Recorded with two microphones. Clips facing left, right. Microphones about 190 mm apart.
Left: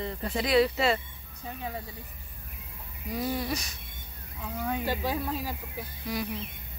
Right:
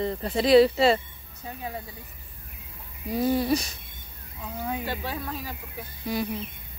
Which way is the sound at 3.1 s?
30° right (ahead or behind).